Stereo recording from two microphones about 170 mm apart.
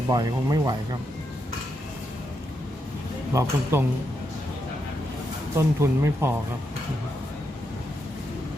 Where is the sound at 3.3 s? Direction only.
15° right (ahead or behind).